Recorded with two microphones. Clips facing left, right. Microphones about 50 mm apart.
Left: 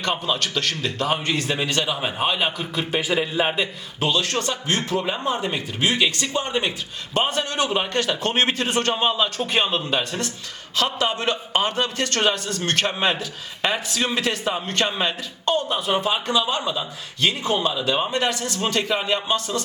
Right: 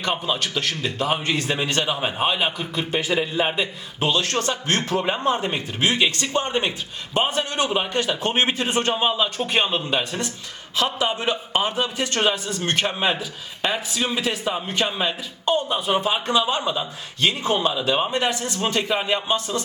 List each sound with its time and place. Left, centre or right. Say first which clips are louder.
0.0 s a man's voice: even; centre
4.0 s a man's voice: even; right
4.8 s a man's voice: right 1 dB; centre
5.3 s a man's voice: right 1 dB; right